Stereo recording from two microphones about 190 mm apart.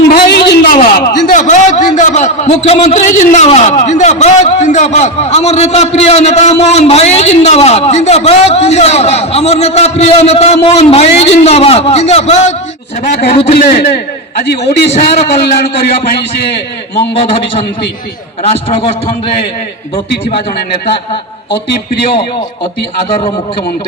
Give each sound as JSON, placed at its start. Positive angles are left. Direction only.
{"t": 0.1, "sound": "a sound", "side_deg": 55}
{"t": 0.9, "sound": "a man's voice", "side_deg": 45}
{"t": 13.6, "sound": "a man's voice", "side_deg": 55}
{"t": 14.9, "sound": "a man's voice", "side_deg": 35}
{"t": 16.5, "sound": "a man's voice", "side_deg": 60}
{"t": 17.2, "sound": "a man's voice", "side_deg": 30}